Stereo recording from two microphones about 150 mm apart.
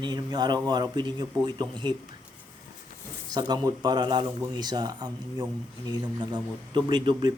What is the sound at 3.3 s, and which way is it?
A man's voice, 30° right (ahead or behind).